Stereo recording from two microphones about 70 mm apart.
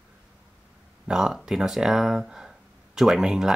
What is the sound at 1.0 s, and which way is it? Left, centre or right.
Speech, centre.